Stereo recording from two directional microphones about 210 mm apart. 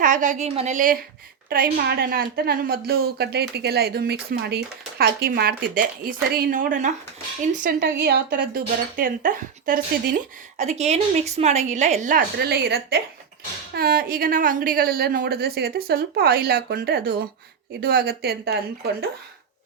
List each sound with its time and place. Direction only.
0.0 s a woman's voice: 35° right (ahead or behind)
7.6 s a woman's voice: 50° right (ahead or behind)